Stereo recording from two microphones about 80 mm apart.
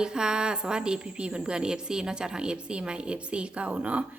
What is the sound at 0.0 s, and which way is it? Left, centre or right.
A woman's voice, centre.